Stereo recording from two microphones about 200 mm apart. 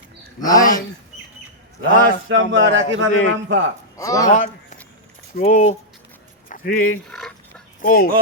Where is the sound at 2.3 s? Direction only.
70° right (ahead or behind).